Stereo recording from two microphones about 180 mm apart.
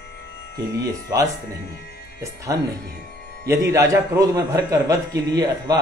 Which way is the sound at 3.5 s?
15° right (ahead or behind).